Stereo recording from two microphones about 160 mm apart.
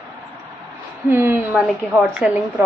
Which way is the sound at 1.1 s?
15° right (ahead or behind).